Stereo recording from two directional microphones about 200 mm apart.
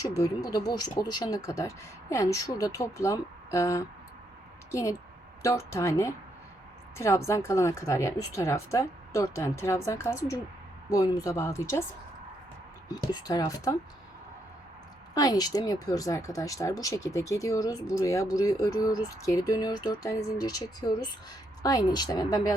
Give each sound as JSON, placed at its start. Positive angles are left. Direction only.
{"t": 0.2, "sound": "speech", "side_deg": 20}
{"t": 13.1, "sound": "speech", "side_deg": 20}
{"t": 15.1, "sound": "speech", "side_deg": 20}